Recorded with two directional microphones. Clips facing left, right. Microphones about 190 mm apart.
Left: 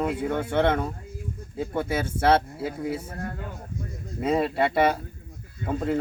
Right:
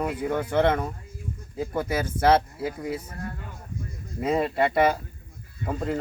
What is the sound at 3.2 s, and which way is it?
Speech, 55° left (ahead or behind).